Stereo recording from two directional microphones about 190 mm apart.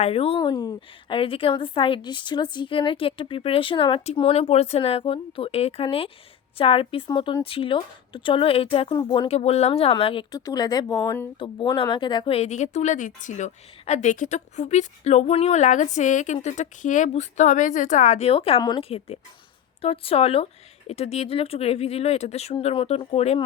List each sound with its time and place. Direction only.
0.0 s a woman's voice: 30° left (ahead or behind)